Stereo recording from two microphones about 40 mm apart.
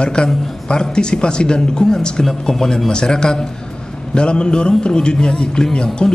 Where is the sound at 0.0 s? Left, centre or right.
Left.